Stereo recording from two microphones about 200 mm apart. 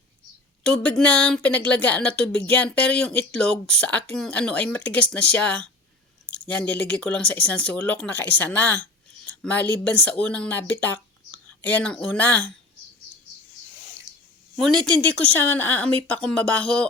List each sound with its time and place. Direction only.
0.6 s a woman's voice: 5° left (ahead or behind)
14.5 s a woman's voice: 5° left (ahead or behind)